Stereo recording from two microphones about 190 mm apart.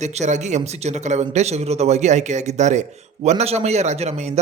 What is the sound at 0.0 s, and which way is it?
A man's voice, 40° right (ahead or behind).